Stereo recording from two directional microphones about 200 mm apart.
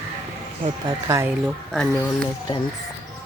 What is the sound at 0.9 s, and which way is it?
Speech, 15° right (ahead or behind).